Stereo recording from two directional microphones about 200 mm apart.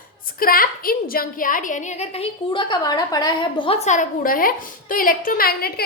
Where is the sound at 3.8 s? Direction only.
40° left (ahead or behind).